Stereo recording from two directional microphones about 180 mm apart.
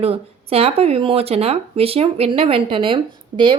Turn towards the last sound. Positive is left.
turn(degrees=-25)  # may be behind; listen again after turning